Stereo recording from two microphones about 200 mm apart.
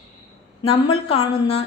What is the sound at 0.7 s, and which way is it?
Speech, 30° left (ahead or behind).